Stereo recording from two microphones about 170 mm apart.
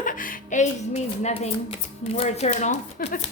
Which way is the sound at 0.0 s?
50° left (ahead or behind).